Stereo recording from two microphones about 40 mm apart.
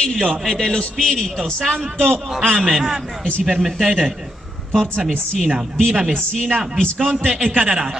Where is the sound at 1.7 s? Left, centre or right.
Right.